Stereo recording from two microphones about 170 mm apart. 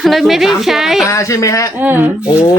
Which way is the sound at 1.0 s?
20° left (ahead or behind).